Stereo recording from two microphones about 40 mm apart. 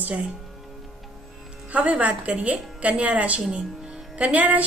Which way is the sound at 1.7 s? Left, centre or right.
Right.